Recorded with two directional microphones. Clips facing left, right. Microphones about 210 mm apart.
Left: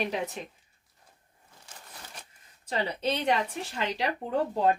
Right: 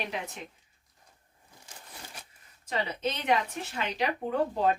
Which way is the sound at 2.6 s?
35° left (ahead or behind).